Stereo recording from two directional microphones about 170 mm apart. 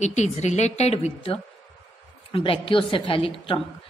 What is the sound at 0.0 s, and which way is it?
A woman's voice, 40° left (ahead or behind).